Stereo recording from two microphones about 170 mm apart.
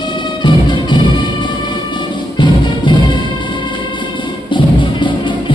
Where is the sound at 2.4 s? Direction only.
30° left (ahead or behind).